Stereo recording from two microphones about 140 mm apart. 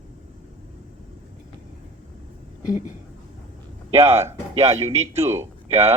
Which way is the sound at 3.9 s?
45° right (ahead or behind).